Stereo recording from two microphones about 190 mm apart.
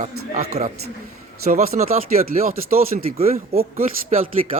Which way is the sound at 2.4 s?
50° right (ahead or behind).